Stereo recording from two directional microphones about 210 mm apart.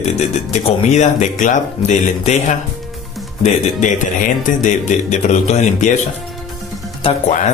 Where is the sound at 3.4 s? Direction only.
35° left (ahead or behind).